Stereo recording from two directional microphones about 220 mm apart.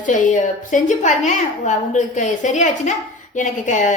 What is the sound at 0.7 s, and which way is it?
A woman's voice, 35° left (ahead or behind).